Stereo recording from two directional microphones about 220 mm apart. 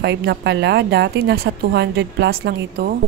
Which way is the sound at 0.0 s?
50° right (ahead or behind).